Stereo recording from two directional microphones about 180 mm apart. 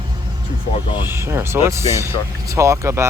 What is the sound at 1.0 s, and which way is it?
Speech, 15° right (ahead or behind).